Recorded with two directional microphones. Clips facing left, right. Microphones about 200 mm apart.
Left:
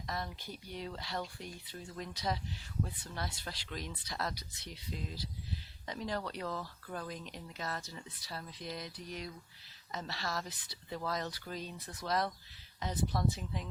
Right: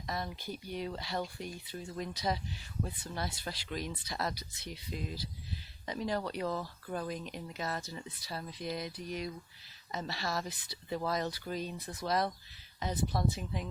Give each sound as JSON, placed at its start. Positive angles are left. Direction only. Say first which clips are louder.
{"t": 0.1, "sound": "speech", "louder": "right 3 dB", "side_deg": -10}